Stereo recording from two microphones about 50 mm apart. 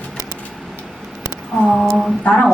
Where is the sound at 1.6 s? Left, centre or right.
Centre.